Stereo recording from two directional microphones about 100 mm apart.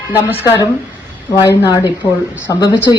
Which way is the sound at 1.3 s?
40° left (ahead or behind).